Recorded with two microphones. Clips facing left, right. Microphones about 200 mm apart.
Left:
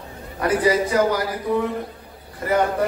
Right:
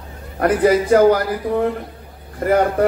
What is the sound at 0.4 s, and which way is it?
Speech, 55° right (ahead or behind).